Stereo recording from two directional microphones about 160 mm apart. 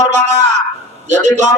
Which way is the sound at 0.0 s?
45° right (ahead or behind).